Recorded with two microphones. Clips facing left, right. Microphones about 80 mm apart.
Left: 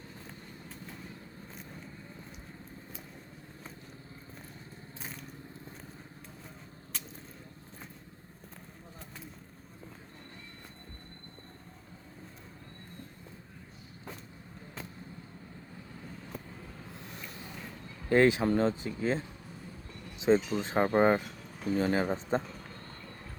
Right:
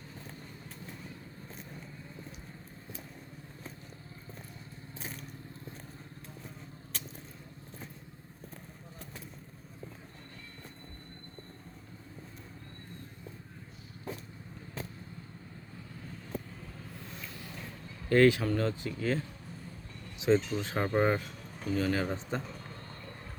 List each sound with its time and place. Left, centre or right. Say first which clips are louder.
16.9 s vehicle: even; left
18.1 s speech: even; left
20.3 s speech: left 1 dB; centre
20.6 s speech: left 3 dB; left
21.2 s a sound: left 1 dB; centre
21.7 s speech: left 2 dB; left
22.4 s a sound: left 3 dB; centre